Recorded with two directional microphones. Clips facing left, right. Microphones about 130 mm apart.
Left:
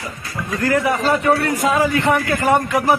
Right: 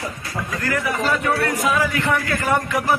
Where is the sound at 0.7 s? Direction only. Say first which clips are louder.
Left 5 dB; 25° left (ahead or behind).